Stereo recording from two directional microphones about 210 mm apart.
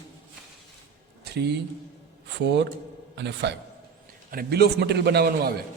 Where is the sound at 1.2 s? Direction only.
50° right (ahead or behind).